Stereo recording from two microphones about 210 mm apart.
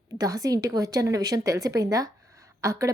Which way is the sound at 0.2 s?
15° right (ahead or behind).